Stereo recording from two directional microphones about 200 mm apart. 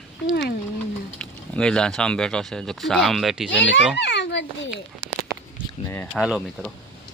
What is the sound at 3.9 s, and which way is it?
Speech, 60° left (ahead or behind).